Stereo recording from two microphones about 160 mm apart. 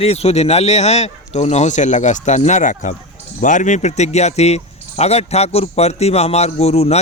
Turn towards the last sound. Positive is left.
turn(degrees=40)  # may be behind; listen again after turning